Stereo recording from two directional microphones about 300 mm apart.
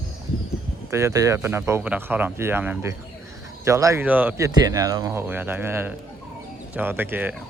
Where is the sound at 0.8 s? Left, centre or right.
Centre.